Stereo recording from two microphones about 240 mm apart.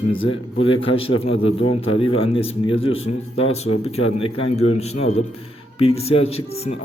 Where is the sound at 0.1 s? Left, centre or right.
Left.